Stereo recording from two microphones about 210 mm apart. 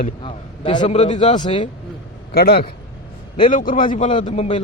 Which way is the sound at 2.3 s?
45° left (ahead or behind).